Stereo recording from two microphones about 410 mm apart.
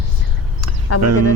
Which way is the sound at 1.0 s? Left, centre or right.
Right.